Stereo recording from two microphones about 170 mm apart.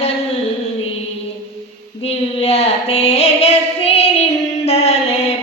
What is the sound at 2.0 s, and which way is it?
Female singing, 35° left (ahead or behind).